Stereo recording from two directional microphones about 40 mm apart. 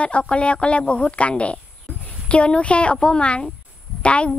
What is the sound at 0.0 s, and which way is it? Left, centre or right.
A woman's voice, left.